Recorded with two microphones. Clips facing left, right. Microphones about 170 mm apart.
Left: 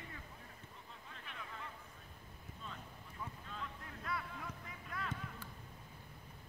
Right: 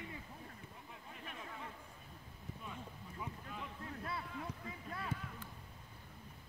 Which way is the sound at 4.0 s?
30° right (ahead or behind).